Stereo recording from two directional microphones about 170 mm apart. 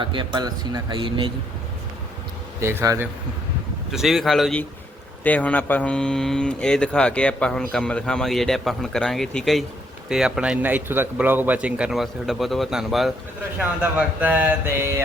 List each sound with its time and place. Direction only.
0.0 s a man's voice: 30° right (ahead or behind)
2.6 s mantra: 15° right (ahead or behind)
3.9 s speech: centre (ahead or behind)
14.2 s mantra: 10° right (ahead or behind)